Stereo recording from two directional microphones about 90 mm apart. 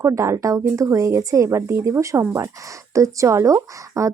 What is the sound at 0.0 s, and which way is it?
Speech, 35° right (ahead or behind).